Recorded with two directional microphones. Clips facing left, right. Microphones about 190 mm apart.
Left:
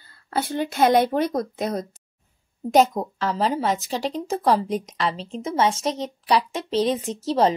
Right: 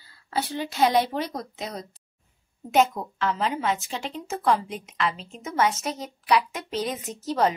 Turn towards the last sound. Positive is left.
turn(degrees=30)  # may be behind; listen again after turning